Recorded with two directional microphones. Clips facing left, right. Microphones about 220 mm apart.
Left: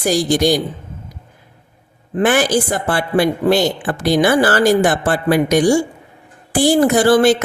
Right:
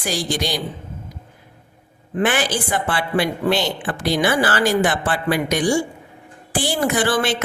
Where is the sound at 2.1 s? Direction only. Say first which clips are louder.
Left 6 dB; 45° left (ahead or behind).